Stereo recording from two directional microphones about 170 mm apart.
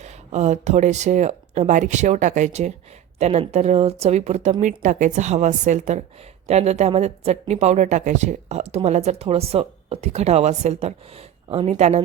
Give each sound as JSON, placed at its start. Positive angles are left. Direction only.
{"t": 0.0, "sound": "speech", "side_deg": -40}